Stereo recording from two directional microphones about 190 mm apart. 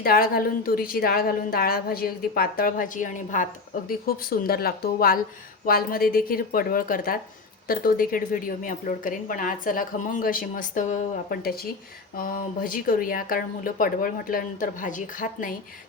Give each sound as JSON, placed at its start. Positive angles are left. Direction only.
{"t": 0.0, "sound": "speech", "side_deg": 50}